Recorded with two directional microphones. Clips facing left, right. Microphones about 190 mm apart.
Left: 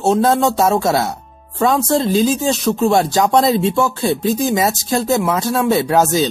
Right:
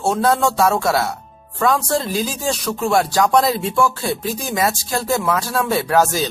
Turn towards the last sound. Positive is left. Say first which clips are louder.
# left 3 dB
turn(degrees=20)  # may be behind; listen again after turning